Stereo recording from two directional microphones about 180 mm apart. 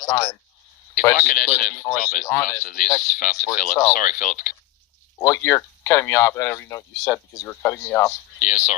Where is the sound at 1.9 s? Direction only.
45° left (ahead or behind).